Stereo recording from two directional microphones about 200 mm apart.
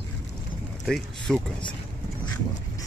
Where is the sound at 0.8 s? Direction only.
Centre (ahead or behind).